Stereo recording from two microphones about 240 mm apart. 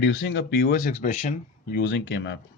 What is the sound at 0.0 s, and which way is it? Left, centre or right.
Speech, left.